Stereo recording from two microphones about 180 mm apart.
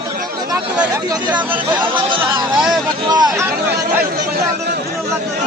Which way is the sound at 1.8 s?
25° right (ahead or behind).